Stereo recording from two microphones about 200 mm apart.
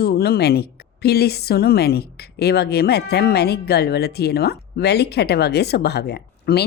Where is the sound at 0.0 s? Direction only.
50° left (ahead or behind).